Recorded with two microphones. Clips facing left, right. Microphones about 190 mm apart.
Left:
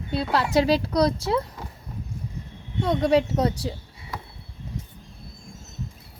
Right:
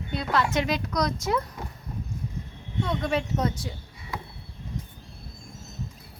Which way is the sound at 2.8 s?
35° left (ahead or behind).